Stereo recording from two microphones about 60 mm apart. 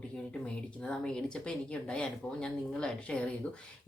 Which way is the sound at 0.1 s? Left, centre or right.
Centre.